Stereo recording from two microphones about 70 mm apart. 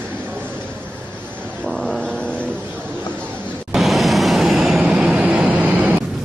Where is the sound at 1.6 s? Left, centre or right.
Centre.